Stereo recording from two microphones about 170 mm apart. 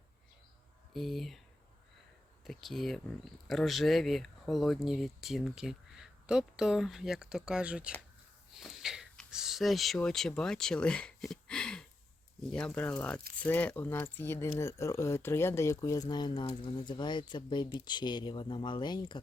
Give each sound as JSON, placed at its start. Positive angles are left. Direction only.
{"t": 0.9, "sound": "speech", "side_deg": 0}
{"t": 2.4, "sound": "speech", "side_deg": 0}